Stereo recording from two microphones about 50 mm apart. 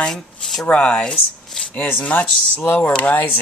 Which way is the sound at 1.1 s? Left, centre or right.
Centre.